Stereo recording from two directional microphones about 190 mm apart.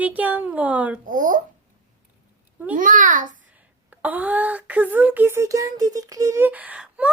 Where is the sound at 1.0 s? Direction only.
45° right (ahead or behind).